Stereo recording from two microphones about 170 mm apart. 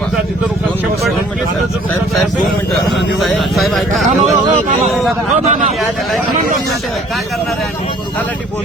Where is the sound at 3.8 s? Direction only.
45° right (ahead or behind).